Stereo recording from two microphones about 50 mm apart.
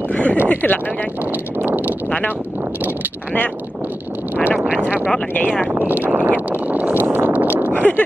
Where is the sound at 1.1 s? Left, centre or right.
Right.